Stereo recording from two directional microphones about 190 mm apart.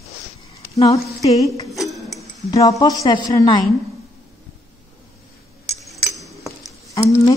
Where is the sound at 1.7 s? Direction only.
Centre (ahead or behind).